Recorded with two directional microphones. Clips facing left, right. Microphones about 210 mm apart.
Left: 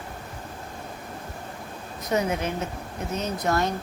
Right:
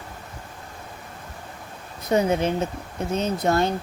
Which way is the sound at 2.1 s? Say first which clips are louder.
Right 5 dB; 30° right (ahead or behind).